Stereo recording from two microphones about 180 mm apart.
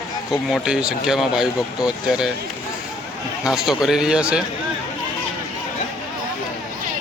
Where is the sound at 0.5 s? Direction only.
5° right (ahead or behind).